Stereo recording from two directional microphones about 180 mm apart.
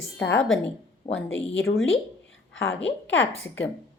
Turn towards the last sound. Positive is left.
turn(degrees=90)